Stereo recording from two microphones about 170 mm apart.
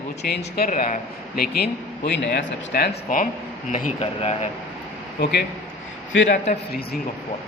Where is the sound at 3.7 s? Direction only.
45° left (ahead or behind).